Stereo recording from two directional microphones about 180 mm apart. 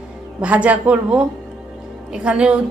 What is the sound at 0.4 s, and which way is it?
A woman's voice, 10° right (ahead or behind).